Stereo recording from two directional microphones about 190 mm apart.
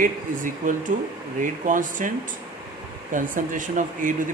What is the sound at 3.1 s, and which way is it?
Speech, 45° right (ahead or behind).